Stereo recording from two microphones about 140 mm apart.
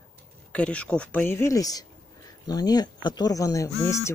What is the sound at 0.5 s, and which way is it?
Speech, 10° left (ahead or behind).